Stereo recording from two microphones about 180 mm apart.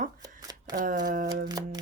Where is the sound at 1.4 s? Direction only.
20° right (ahead or behind).